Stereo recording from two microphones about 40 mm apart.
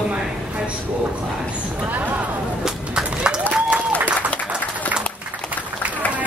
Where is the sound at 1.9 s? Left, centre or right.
Right.